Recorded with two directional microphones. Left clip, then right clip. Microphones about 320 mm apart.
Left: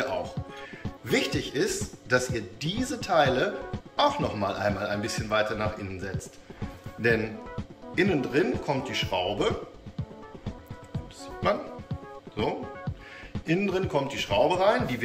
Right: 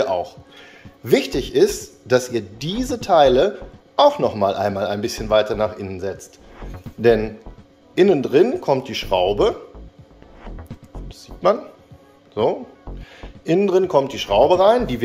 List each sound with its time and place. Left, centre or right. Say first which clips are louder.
0.0 s music: right 10 dB; centre
1.0 s speech: right 9 dB; centre
13.5 s speech: right 11 dB; centre